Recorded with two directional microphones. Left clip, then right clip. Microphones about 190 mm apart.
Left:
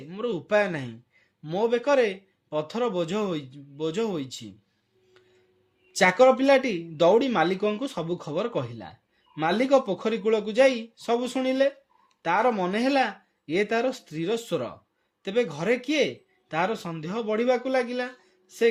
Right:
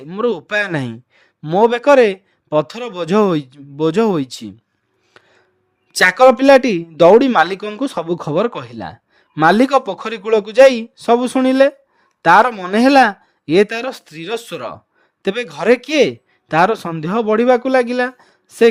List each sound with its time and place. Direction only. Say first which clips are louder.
0.1 s a man's voice: right 7 dB; 55° right (ahead or behind)
5.9 s a man's voice: right 9 dB; 60° right (ahead or behind)